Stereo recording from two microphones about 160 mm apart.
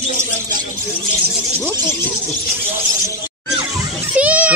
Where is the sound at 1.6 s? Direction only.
10° left (ahead or behind).